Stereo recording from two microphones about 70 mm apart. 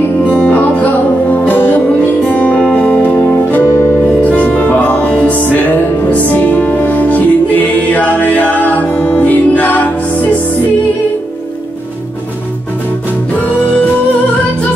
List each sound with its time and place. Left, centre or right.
0.3 s music: left
3.6 s music: left
4.2 s music: left